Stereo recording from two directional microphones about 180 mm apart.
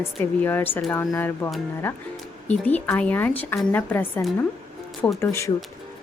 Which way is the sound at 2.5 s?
10° left (ahead or behind).